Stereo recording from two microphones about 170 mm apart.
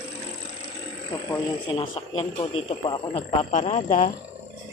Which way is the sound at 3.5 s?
45° left (ahead or behind).